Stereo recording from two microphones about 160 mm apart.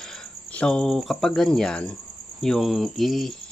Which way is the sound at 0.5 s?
5° left (ahead or behind).